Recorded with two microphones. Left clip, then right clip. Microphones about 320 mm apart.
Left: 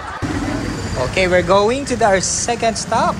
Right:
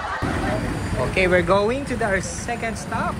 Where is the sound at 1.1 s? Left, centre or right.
Centre.